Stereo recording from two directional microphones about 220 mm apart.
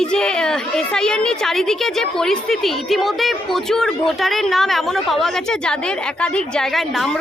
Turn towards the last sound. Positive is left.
turn(degrees=0)  # may be behind; listen again after turning